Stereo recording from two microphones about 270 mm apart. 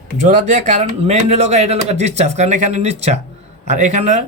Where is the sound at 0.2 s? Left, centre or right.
Right.